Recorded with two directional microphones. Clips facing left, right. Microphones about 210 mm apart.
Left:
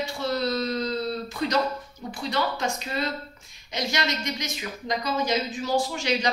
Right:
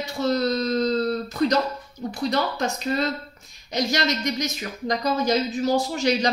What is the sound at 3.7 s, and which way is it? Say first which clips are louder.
Speech: right 5 dB; 40° right (ahead or behind).